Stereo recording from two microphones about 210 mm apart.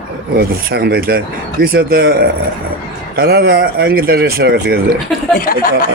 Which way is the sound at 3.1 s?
50° right (ahead or behind).